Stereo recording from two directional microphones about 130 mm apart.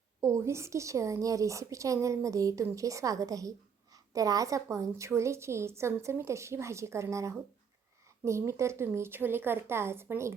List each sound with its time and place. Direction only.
0.2 s a woman's voice: 20° right (ahead or behind)